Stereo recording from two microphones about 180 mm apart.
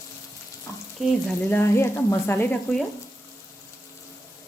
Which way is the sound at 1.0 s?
5° left (ahead or behind).